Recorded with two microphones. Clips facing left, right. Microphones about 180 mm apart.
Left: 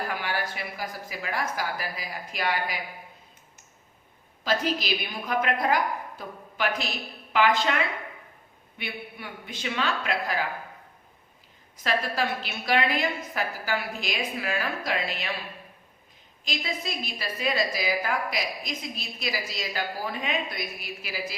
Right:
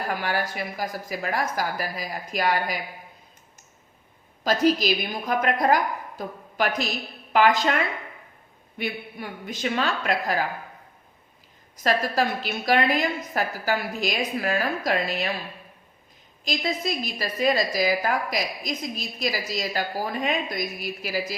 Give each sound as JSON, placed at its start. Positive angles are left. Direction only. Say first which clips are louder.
{"t": 0.1, "sound": "a woman's voice", "louder": "right 4 dB", "side_deg": -45}
{"t": 4.4, "sound": "a woman's voice", "louder": "right 6 dB", "side_deg": -40}
{"t": 8.8, "sound": "a woman's voice", "louder": "right 6 dB", "side_deg": -40}
{"t": 11.8, "sound": "a woman's voice", "louder": "right 4 dB", "side_deg": -40}
{"t": 16.4, "sound": "a woman's voice", "louder": "right 6 dB", "side_deg": -40}